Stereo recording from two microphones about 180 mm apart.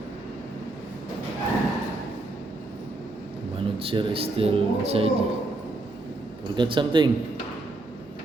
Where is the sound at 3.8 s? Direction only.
30° right (ahead or behind).